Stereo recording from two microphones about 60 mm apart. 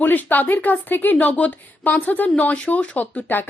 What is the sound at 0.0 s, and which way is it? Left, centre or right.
A woman's voice, left.